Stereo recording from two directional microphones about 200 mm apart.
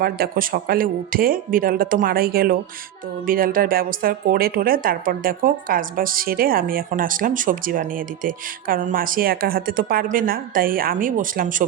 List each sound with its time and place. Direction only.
0.0 s a woman's voice: 45° right (ahead or behind)